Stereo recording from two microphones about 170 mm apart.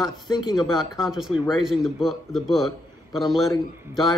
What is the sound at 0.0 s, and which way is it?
Speech, 25° left (ahead or behind).